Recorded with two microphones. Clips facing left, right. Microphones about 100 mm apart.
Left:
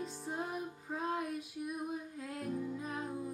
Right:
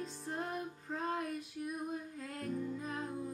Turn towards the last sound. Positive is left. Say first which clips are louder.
# even
turn(degrees=5)  # may be behind; listen again after turning